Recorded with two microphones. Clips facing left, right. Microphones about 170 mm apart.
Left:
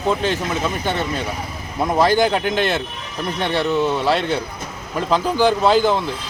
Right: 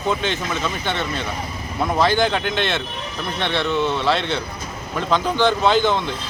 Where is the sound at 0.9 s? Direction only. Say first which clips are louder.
Left 1 dB; 40° left (ahead or behind).